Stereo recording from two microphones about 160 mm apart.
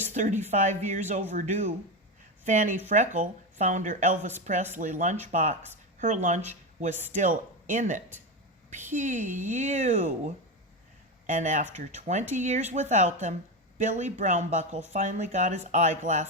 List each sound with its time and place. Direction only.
0.1 s speech: 50° right (ahead or behind)